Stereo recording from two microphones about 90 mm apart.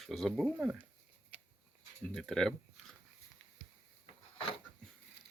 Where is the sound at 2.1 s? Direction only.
5° left (ahead or behind).